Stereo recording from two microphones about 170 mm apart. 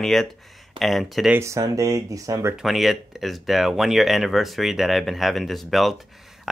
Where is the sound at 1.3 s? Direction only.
15° right (ahead or behind).